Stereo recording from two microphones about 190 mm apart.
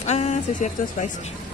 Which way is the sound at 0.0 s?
35° left (ahead or behind).